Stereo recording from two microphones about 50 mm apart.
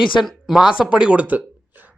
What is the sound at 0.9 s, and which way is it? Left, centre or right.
Speech, centre.